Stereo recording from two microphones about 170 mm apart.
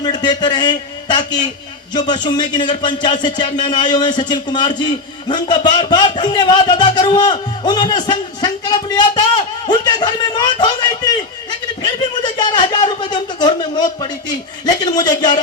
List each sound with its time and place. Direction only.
0.0 s a man's voice: 25° left (ahead or behind)